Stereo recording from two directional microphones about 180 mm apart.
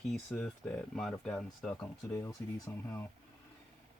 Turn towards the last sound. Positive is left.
turn(degrees=10)  # may be behind; listen again after turning